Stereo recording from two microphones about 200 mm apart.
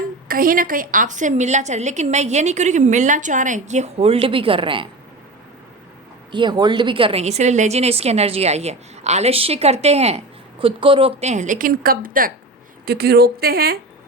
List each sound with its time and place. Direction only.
0.3 s a woman's voice: 45° right (ahead or behind); by 4.9 s 25° right (ahead or behind)
6.3 s a woman's voice: 20° right (ahead or behind); by 13.7 s 50° right (ahead or behind)